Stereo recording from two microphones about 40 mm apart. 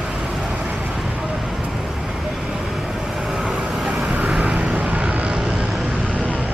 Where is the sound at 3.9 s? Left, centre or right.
Centre.